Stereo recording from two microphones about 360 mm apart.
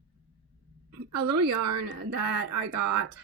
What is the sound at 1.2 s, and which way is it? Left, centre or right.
Speech, right.